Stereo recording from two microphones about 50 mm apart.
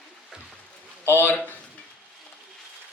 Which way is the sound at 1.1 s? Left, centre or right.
Left.